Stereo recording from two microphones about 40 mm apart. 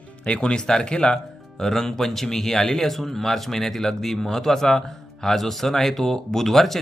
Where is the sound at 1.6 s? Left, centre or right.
Centre.